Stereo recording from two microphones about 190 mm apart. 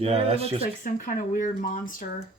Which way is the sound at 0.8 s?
45° left (ahead or behind).